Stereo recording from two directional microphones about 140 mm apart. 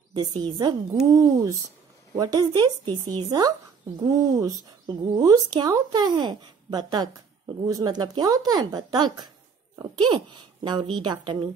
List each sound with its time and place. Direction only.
0.1 s speech: 30° right (ahead or behind)